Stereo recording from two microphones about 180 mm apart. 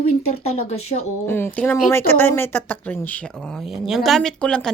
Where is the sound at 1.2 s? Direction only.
10° left (ahead or behind).